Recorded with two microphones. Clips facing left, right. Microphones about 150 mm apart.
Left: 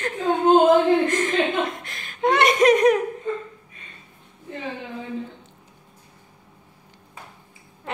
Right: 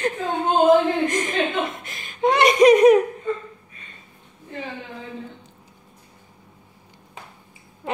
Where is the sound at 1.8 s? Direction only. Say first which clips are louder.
Right 1 dB; 5° right (ahead or behind).